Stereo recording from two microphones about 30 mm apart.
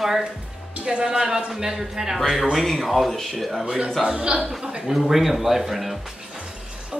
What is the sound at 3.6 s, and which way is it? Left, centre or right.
Speech, right.